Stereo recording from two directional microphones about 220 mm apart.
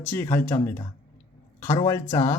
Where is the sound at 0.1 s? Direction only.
10° left (ahead or behind).